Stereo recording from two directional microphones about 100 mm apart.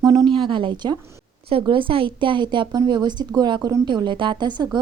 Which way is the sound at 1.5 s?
60° right (ahead or behind).